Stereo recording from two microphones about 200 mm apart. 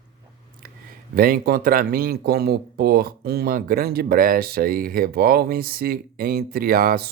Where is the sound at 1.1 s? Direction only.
45° right (ahead or behind).